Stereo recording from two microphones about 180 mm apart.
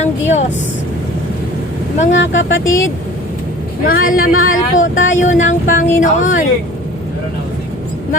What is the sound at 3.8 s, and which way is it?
Speech, 50° left (ahead or behind).